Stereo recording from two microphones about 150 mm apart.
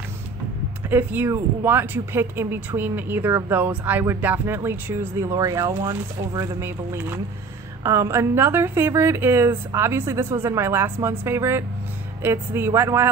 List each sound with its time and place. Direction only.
0.8 s speech: 15° right (ahead or behind)